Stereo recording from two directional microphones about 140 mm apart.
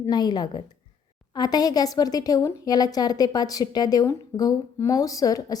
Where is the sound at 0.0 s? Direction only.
30° left (ahead or behind).